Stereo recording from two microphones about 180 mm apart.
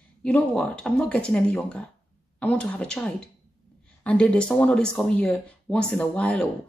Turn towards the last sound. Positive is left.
turn(degrees=5)  # may be behind; listen again after turning